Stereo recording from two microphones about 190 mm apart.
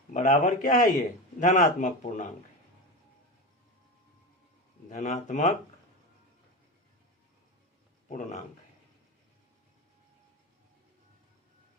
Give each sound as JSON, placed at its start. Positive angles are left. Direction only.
{"t": 0.1, "sound": "speech", "side_deg": 40}
{"t": 4.9, "sound": "speech", "side_deg": 40}
{"t": 8.0, "sound": "speech", "side_deg": 40}